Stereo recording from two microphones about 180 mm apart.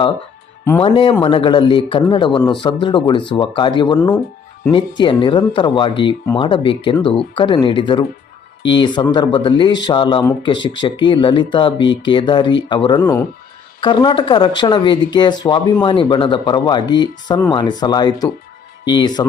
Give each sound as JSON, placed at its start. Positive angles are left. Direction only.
{"t": 0.8, "sound": "speech", "side_deg": 30}
{"t": 13.0, "sound": "speech", "side_deg": 15}
{"t": 13.8, "sound": "speech", "side_deg": 25}